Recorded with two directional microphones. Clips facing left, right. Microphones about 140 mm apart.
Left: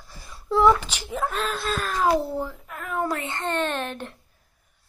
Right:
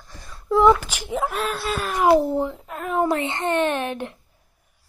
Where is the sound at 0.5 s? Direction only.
15° right (ahead or behind).